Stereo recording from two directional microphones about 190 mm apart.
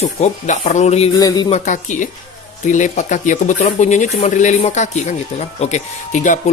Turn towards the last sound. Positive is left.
turn(degrees=40)  # may be behind; listen again after turning